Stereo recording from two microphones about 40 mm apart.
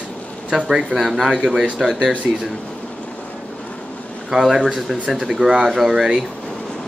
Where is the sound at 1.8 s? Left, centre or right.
Centre.